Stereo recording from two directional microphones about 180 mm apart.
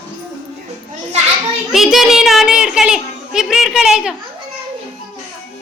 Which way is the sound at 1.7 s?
Centre (ahead or behind).